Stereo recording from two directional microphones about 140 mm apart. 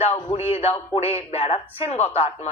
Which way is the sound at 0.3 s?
45° left (ahead or behind).